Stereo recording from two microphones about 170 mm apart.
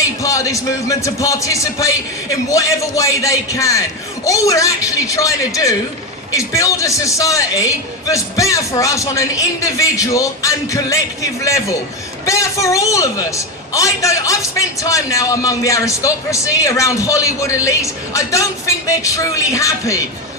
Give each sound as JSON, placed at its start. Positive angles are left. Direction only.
{"t": 0.2, "sound": "a man's voice", "side_deg": 20}